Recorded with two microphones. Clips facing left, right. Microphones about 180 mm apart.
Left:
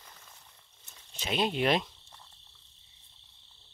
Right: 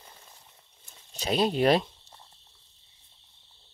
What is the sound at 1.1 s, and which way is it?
Speech, 40° right (ahead or behind).